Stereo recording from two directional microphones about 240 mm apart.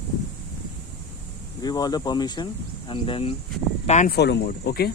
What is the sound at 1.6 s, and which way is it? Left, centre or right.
Speech, centre.